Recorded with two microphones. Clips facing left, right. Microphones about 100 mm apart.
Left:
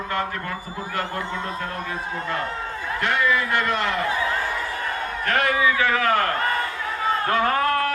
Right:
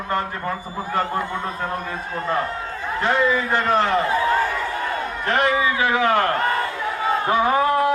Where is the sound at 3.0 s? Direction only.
30° right (ahead or behind).